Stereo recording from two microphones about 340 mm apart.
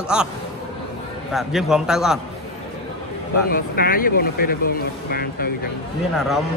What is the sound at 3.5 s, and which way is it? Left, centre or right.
Speech, left.